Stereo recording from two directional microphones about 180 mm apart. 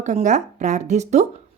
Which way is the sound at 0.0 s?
45° right (ahead or behind).